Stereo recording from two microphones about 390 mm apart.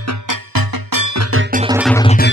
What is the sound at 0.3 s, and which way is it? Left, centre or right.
Music, right.